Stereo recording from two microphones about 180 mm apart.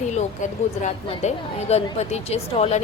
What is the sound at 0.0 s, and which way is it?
A woman's voice, 40° left (ahead or behind).